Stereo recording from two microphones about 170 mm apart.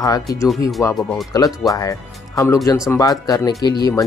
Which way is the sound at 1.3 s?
20° left (ahead or behind).